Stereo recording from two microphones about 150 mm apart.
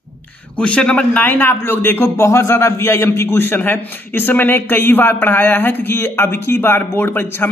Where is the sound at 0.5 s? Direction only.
5° left (ahead or behind).